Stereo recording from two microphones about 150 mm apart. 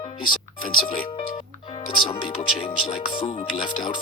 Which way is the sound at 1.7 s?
35° left (ahead or behind).